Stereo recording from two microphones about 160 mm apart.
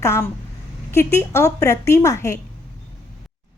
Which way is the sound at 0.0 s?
15° left (ahead or behind).